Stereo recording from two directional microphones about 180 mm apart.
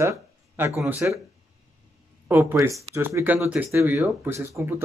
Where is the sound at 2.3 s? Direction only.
15° right (ahead or behind).